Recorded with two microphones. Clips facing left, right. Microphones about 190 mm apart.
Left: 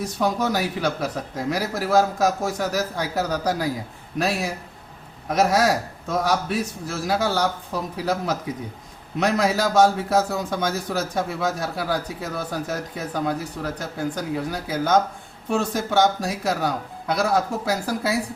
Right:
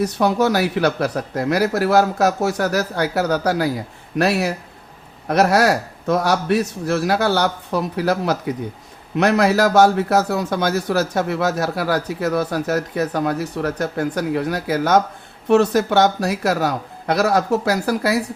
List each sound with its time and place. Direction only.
0.0 s a man's voice: 70° right (ahead or behind)